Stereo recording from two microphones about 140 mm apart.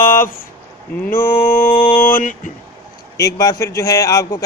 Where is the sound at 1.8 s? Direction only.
75° left (ahead or behind).